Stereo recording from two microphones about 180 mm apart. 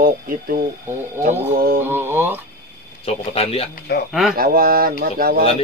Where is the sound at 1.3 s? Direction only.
50° right (ahead or behind).